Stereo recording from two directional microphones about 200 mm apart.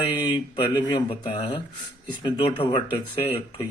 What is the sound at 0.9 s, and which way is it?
Speech, 20° left (ahead or behind).